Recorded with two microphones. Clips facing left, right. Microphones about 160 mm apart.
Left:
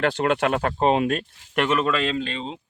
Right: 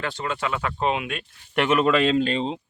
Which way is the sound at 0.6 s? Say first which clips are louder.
Left 5 dB; 40° left (ahead or behind).